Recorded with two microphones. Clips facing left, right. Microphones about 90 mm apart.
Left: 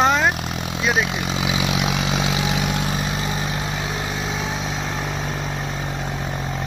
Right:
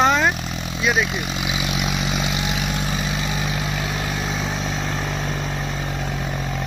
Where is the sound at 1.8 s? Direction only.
90° left.